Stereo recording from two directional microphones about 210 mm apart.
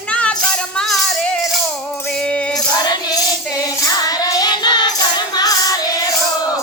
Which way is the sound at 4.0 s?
15° left (ahead or behind).